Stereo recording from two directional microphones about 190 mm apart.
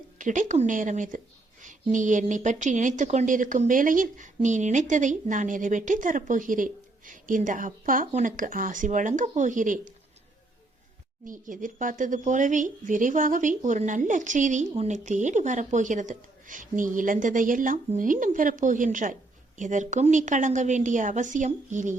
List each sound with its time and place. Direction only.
0.2 s a woman's voice: 40° right (ahead or behind)
11.3 s a woman's voice: 45° right (ahead or behind)